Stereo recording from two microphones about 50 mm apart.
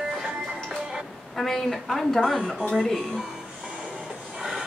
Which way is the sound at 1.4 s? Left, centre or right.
Centre.